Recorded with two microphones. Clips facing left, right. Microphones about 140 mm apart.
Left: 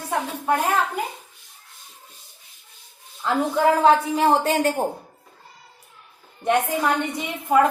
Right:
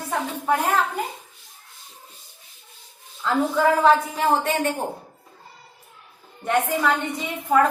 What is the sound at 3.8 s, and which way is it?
Speech, 30° left (ahead or behind).